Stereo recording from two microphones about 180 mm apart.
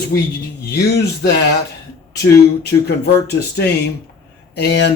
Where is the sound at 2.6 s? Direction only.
60° left (ahead or behind).